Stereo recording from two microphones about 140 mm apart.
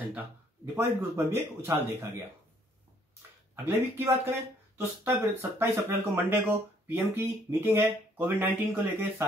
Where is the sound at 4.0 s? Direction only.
20° right (ahead or behind).